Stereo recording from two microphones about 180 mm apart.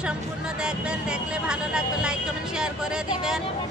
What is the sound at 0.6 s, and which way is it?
Speech, 5° right (ahead or behind).